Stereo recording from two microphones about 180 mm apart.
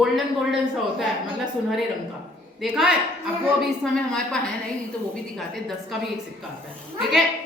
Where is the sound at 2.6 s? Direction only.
Centre (ahead or behind).